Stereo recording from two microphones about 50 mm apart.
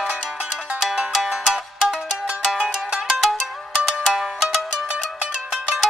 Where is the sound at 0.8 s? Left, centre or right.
Centre.